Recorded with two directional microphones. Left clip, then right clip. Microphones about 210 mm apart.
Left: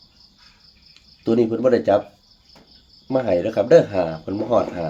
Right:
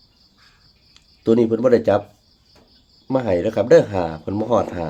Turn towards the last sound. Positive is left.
turn(degrees=-50)  # may be behind; listen again after turning